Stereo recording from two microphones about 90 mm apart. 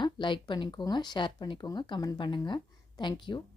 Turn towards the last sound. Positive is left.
turn(degrees=60)  # may be behind; listen again after turning